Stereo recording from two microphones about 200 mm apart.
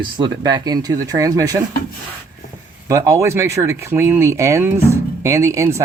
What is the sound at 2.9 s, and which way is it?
Speech, 15° right (ahead or behind).